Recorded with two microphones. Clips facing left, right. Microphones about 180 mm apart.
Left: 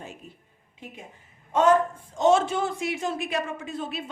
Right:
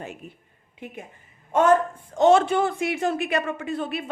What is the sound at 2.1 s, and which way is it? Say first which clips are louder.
A woman's voice: right 4 dB; 60° right (ahead or behind).